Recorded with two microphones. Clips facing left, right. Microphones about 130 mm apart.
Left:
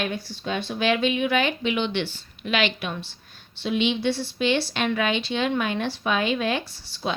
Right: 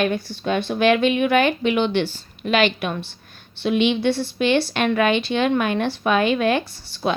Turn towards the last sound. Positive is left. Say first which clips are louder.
# right 5 dB
turn(degrees=-55)  # may be behind; listen again after turning